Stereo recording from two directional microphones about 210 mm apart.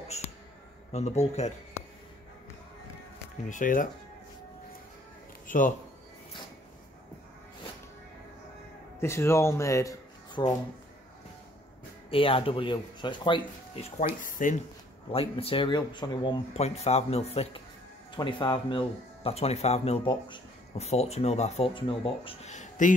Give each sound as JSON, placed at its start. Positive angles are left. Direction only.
{"t": 0.9, "sound": "a man's voice", "side_deg": 30}
{"t": 3.4, "sound": "a man's voice", "side_deg": 40}
{"t": 9.0, "sound": "speech", "side_deg": 10}
{"t": 12.1, "sound": "speech", "side_deg": 25}
{"t": 15.1, "sound": "speech", "side_deg": 25}